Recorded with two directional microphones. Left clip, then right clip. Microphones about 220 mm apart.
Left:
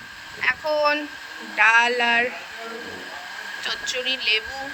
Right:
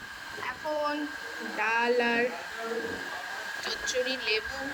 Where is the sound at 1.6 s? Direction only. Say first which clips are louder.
Left 12 dB; 40° left (ahead or behind).